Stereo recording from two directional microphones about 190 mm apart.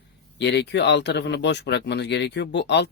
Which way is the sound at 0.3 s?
65° left (ahead or behind).